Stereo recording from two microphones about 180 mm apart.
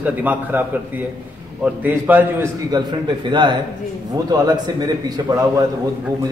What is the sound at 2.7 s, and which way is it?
A man's voice, 25° right (ahead or behind).